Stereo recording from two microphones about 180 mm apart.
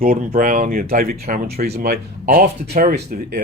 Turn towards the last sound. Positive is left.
turn(degrees=-55)  # may be behind; listen again after turning